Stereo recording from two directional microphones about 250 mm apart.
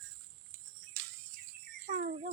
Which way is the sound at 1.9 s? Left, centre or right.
Right.